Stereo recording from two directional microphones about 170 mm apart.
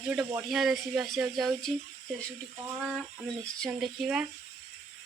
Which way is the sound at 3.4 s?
Centre (ahead or behind).